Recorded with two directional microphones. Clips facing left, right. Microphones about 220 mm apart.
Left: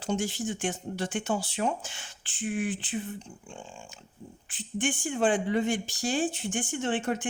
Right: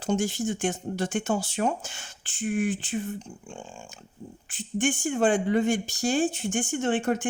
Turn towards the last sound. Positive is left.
turn(degrees=-45)  # may be behind; listen again after turning